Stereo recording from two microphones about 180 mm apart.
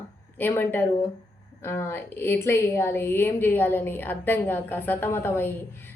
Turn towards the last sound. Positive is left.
turn(degrees=10)  # may be behind; listen again after turning